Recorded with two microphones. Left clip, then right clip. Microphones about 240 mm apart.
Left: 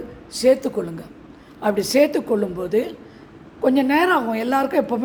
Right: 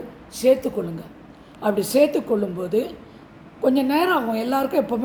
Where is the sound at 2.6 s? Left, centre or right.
Left.